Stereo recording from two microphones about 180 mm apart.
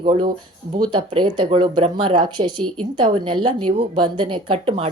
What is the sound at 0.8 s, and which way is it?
A woman's voice, 25° right (ahead or behind).